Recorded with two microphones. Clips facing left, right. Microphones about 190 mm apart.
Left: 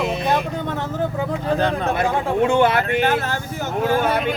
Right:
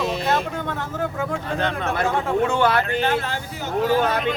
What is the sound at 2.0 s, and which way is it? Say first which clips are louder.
Speech: even; 20° left (ahead or behind).